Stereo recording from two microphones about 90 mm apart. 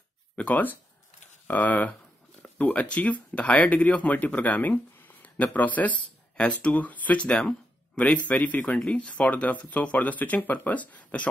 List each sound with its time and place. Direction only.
0.4 s speech: 15° left (ahead or behind)